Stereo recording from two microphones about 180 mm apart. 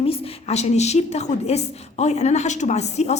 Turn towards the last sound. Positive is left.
turn(degrees=40)  # may be behind; listen again after turning